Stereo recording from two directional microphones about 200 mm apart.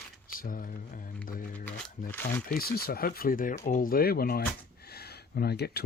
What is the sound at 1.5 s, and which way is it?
Speech, 10° left (ahead or behind).